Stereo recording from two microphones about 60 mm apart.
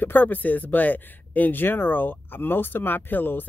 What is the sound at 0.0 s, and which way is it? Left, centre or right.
Speech, left.